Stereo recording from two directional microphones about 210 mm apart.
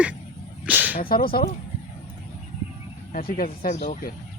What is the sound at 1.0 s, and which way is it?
Speech, 45° left (ahead or behind).